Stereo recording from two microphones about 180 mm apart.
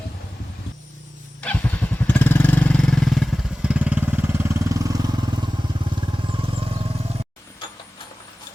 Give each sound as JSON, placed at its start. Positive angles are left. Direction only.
{"t": 1.4, "sound": "motorcycle", "side_deg": 10}
{"t": 7.6, "sound": "printer", "side_deg": 25}